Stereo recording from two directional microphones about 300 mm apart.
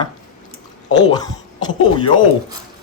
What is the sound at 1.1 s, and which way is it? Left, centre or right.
Speech, centre.